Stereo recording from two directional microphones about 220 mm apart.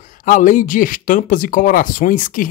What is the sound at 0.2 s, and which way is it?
Speech, 35° left (ahead or behind).